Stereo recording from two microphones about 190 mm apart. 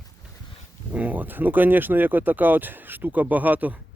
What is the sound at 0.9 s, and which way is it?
A man's voice, 10° right (ahead or behind).